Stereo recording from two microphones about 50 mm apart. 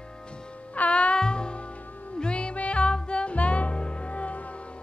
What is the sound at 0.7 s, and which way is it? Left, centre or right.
Music, left.